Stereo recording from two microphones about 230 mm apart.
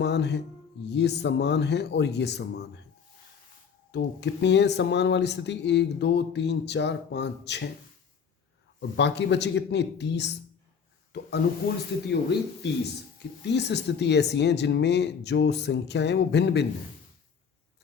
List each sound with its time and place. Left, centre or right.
0.0 s speech: left
3.9 s speech: left
8.8 s speech: left
12.6 s speech: left